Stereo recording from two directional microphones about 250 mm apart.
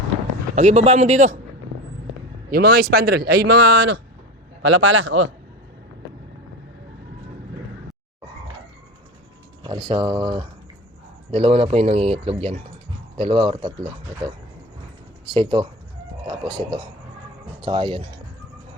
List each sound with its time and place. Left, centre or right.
0.5 s speech: right
2.5 s a man's voice: right
9.6 s speech: centre